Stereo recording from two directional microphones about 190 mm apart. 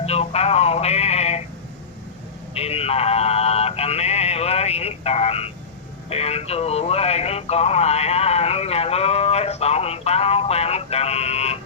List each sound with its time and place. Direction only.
0.0 s speech: 35° left (ahead or behind)
2.6 s speech: 35° left (ahead or behind)